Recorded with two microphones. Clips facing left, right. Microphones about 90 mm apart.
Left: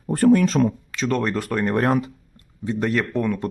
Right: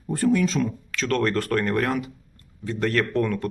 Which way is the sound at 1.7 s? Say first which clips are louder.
Left 4 dB; 30° left (ahead or behind).